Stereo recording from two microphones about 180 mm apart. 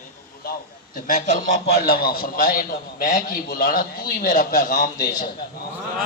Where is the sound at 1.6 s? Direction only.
60° left (ahead or behind); by 4.9 s 45° left (ahead or behind).